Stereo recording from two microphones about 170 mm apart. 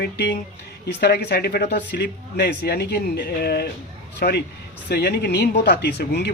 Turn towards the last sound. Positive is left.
turn(degrees=75)  # may be behind; listen again after turning